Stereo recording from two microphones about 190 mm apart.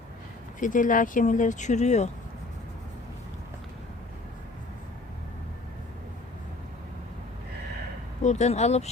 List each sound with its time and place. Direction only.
0.6 s speech: 45° left (ahead or behind)
8.2 s speech: 40° left (ahead or behind)